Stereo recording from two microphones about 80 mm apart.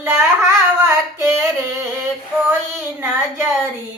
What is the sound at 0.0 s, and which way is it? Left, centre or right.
Carnatic music, right.